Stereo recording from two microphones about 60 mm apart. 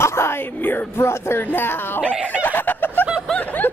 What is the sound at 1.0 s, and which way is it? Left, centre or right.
Speech, left.